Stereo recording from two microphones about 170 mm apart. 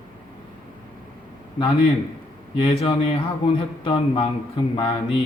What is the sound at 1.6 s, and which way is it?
Speech, 35° left (ahead or behind).